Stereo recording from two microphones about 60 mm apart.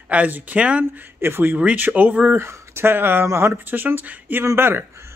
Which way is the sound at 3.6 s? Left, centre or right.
Right.